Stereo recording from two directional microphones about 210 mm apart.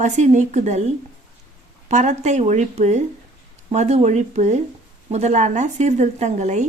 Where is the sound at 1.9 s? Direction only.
35° right (ahead or behind).